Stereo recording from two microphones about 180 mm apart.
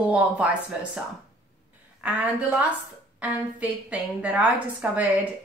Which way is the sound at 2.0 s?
10° right (ahead or behind).